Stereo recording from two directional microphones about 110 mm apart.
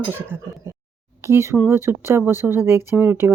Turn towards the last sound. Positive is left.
turn(degrees=-20)  # may be behind; listen again after turning